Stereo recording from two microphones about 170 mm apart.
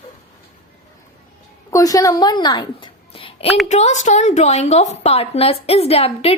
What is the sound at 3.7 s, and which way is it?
A woman's voice, 45° left (ahead or behind).